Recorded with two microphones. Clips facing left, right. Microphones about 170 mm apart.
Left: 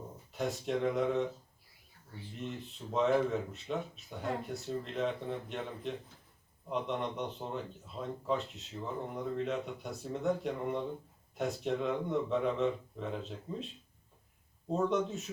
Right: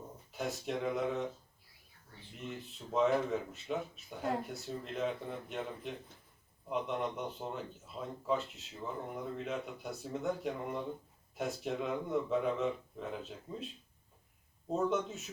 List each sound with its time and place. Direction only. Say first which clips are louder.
0.3 s speech: left 3 dB; centre (ahead or behind)
2.4 s speech: left 2 dB; centre (ahead or behind)
14.8 s speech: left 2 dB; centre (ahead or behind)